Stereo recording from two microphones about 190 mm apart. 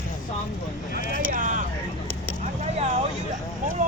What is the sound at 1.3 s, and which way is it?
Vehicle, 45° right (ahead or behind).